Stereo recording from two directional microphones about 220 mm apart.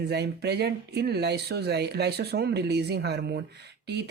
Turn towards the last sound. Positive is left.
turn(degrees=-50)  # may be behind; listen again after turning